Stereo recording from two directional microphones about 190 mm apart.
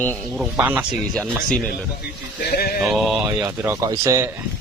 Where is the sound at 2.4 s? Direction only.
55° left (ahead or behind).